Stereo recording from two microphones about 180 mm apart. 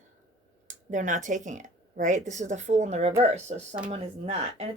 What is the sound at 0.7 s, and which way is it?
Speech, 45° right (ahead or behind).